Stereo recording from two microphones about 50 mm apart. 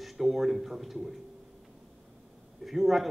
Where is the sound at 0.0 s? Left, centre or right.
Centre.